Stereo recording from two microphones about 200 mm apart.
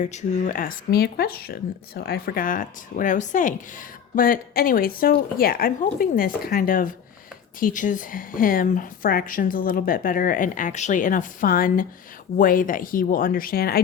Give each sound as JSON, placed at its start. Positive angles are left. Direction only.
{"t": 0.0, "sound": "speech", "side_deg": 35}